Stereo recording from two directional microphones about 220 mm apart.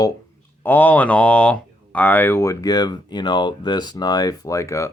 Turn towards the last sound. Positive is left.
turn(degrees=15)  # may be behind; listen again after turning